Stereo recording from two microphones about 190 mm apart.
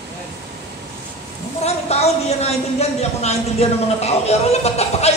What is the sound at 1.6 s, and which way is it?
A woman's voice, 35° left (ahead or behind).